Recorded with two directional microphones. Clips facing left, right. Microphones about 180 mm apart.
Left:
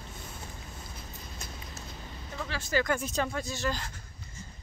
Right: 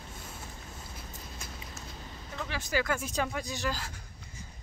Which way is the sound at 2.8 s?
10° right (ahead or behind).